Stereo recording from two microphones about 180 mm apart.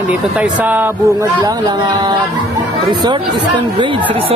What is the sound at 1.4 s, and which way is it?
Speech, 20° right (ahead or behind).